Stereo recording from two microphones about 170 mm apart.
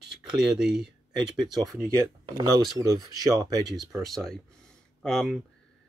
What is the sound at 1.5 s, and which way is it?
Speech, 20° right (ahead or behind).